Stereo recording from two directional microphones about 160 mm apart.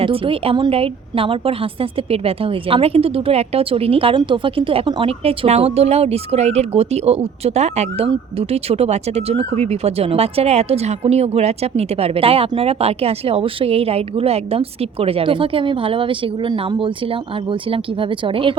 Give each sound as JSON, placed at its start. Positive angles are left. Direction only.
{"t": 0.0, "sound": "a woman's voice", "side_deg": -35}